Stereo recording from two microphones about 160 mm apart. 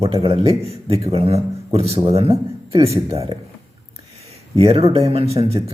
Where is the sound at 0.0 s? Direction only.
35° right (ahead or behind).